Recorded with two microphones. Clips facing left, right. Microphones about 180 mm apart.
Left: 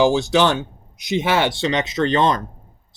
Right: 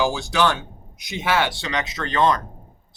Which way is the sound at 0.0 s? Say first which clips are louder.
Left 5 dB; 20° left (ahead or behind).